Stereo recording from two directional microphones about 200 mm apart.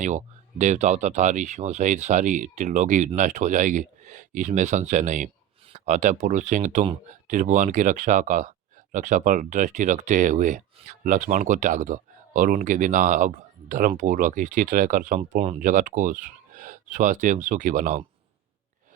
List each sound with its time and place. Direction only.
0.0 s speech: 35° right (ahead or behind)